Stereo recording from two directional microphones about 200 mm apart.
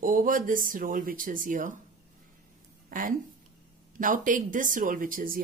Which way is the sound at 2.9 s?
45° right (ahead or behind).